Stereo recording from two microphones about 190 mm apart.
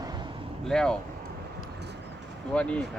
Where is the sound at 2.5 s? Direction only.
5° left (ahead or behind).